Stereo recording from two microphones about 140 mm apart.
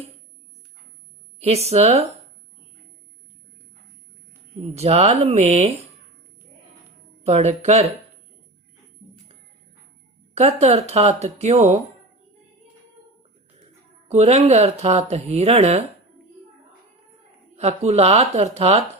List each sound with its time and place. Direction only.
1.4 s speech: 50° right (ahead or behind)
4.6 s speech: 50° right (ahead or behind)
7.3 s speech: 50° right (ahead or behind)
10.3 s speech: 50° right (ahead or behind)
14.1 s speech: 50° right (ahead or behind)
17.6 s speech: 50° right (ahead or behind)